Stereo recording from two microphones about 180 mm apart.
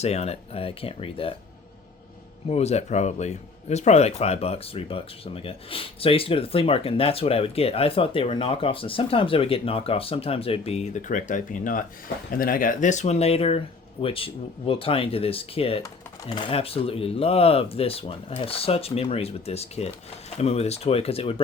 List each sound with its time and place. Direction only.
0.0 s speech: 35° left (ahead or behind)
2.5 s speech: 35° left (ahead or behind)